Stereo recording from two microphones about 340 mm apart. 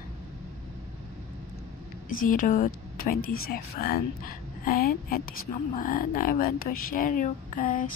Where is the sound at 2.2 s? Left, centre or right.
Left.